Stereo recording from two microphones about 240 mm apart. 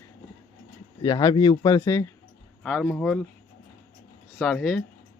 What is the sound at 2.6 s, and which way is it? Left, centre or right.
Speech, centre.